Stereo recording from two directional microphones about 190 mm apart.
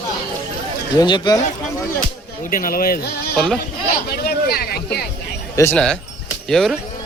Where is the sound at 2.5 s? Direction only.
50° left (ahead or behind).